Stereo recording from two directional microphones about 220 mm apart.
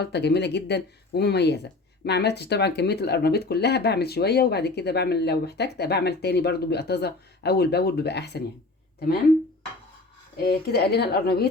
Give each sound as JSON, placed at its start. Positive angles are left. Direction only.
{"t": 0.0, "sound": "speech", "side_deg": 50}
{"t": 10.3, "sound": "speech", "side_deg": 45}